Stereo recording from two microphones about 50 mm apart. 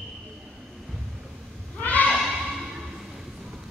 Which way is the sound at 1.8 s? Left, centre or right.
Left.